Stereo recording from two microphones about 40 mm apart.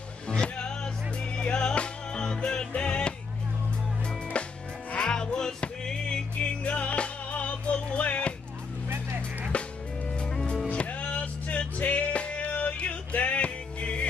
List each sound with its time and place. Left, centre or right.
0.3 s music: left
4.9 s music: centre
6.6 s music: left
8.8 s vehicle: right
9.5 s music: left